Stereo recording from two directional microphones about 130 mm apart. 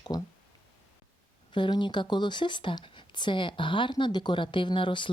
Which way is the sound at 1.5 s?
40° left (ahead or behind).